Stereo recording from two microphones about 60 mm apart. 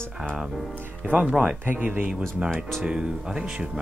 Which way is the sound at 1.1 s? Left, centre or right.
Right.